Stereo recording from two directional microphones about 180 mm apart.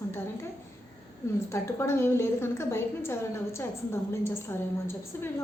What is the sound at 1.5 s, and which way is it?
A woman's voice, 15° left (ahead or behind).